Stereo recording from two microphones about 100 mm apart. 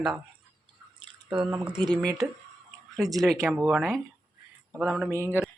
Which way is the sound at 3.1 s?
5° left (ahead or behind).